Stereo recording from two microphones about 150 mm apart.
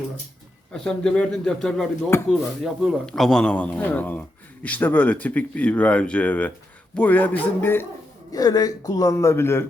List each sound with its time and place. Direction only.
0.7 s speech: 5° left (ahead or behind)
2.0 s speech: 15° left (ahead or behind)
2.3 s speech: centre (ahead or behind)
8.3 s a man's voice: 25° left (ahead or behind)